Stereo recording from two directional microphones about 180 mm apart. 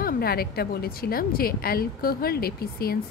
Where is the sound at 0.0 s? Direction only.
60° left (ahead or behind).